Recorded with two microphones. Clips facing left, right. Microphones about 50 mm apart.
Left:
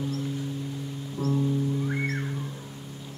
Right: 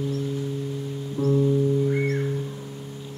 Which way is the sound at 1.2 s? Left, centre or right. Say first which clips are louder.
Right 5 dB; right.